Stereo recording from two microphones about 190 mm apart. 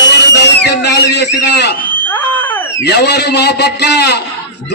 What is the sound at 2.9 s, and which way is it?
A man's voice, 60° left (ahead or behind).